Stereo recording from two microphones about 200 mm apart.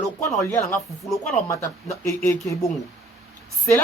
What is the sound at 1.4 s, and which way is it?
Speech, 15° left (ahead or behind).